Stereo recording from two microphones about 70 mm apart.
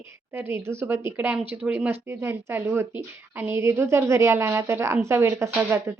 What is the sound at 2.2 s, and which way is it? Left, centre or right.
Speech, right.